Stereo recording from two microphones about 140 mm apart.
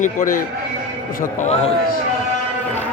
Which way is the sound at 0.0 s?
65° left (ahead or behind).